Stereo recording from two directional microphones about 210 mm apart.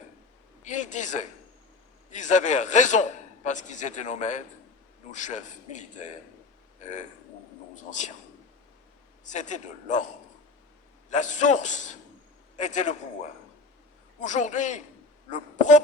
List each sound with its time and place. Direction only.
0.6 s a man's voice: 35° left (ahead or behind)
7.8 s a man's voice: 35° left (ahead or behind)
9.2 s a man's voice: 35° left (ahead or behind)
11.1 s a man's voice: 35° left (ahead or behind)
14.2 s a man's voice: 35° left (ahead or behind)